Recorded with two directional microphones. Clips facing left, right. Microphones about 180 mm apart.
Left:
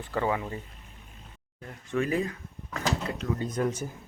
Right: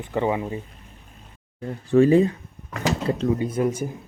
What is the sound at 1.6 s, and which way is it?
Speech, 30° right (ahead or behind).